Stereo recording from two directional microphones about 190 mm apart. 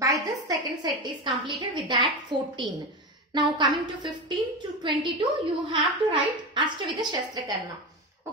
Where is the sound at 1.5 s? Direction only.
25° right (ahead or behind).